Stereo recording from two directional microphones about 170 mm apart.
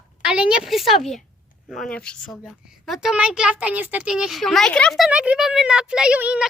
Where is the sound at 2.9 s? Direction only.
5° right (ahead or behind).